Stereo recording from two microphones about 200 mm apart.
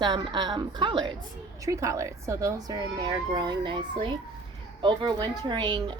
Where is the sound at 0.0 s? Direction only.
20° right (ahead or behind).